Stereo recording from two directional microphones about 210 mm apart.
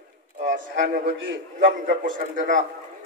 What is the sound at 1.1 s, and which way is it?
Speech, 60° right (ahead or behind).